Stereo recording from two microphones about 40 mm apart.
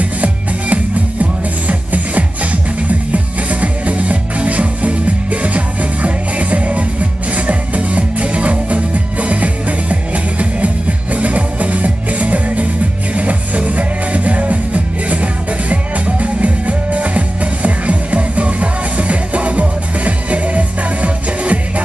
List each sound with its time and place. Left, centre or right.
0.0 s music: right